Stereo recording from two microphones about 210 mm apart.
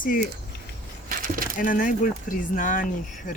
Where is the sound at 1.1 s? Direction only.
40° right (ahead or behind).